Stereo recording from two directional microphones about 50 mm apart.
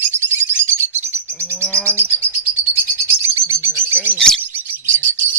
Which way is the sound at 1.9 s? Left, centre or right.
Right.